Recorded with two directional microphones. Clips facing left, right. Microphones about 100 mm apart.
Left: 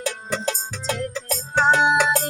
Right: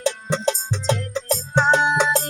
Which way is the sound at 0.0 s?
25° right (ahead or behind).